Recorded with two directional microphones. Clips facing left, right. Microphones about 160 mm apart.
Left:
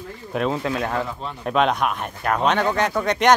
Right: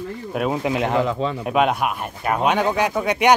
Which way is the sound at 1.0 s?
90° right.